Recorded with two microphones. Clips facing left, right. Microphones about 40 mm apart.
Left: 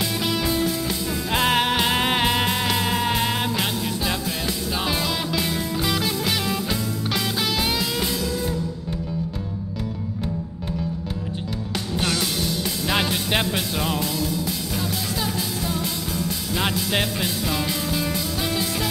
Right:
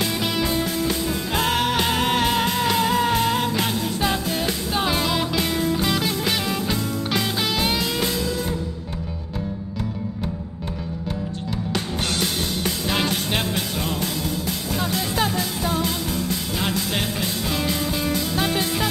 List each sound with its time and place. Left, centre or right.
0.5 s music: centre
1.3 s music: left
4.0 s music: right
4.8 s music: centre
5.4 s music: right
5.7 s music: centre
14.0 s music: right
16.5 s music: centre
17.5 s music: centre
18.1 s music: centre